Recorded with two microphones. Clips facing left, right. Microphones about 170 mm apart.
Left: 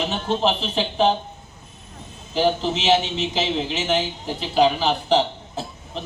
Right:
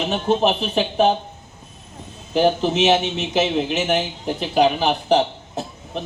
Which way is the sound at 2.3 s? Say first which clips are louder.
Right 3 dB; 55° right (ahead or behind).